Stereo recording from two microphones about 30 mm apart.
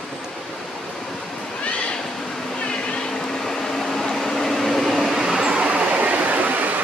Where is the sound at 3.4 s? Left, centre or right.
Centre.